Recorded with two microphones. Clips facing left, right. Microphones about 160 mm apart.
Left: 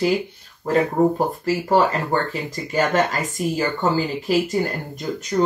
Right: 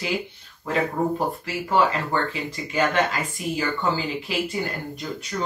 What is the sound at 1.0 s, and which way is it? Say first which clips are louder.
Speech: left 6 dB; 45° left (ahead or behind).